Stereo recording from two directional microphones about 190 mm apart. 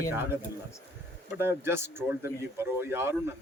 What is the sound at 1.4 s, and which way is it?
Speech, 10° right (ahead or behind).